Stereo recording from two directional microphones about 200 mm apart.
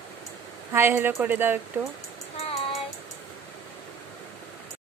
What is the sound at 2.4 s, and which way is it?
Child singing, 30° left (ahead or behind).